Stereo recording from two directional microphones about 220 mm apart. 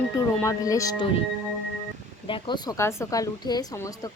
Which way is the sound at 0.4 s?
15° left (ahead or behind).